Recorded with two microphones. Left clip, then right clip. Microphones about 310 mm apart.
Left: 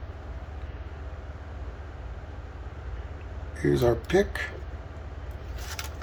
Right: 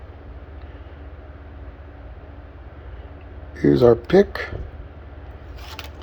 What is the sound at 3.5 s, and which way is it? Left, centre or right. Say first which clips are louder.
Speech: right 10 dB; centre.